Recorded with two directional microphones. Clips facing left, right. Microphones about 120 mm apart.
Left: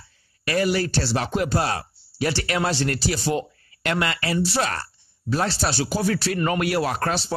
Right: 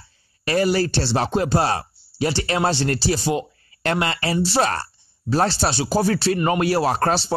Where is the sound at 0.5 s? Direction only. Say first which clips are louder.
Right 3 dB; 35° right (ahead or behind).